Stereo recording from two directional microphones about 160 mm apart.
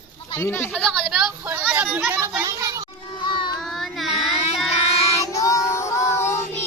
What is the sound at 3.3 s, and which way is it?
Child singing, 30° left (ahead or behind).